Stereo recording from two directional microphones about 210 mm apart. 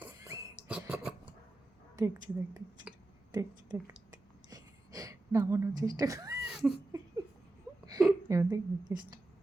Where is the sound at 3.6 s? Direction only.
5° right (ahead or behind).